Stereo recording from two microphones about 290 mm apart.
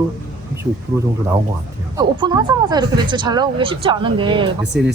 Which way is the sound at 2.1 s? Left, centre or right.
Centre.